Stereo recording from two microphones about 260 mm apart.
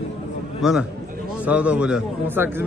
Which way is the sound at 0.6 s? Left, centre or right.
Centre.